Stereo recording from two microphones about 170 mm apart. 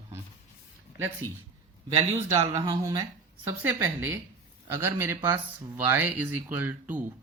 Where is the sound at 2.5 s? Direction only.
20° right (ahead or behind).